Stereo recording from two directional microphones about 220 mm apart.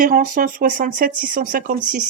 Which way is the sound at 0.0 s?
40° right (ahead or behind).